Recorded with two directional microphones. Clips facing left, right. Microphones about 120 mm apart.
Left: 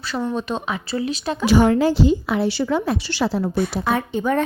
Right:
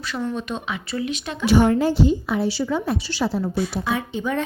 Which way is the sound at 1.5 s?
90° left.